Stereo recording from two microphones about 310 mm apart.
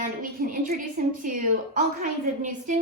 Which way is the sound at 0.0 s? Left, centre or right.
Right.